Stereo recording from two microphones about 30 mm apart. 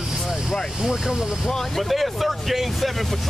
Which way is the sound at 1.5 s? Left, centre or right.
Centre.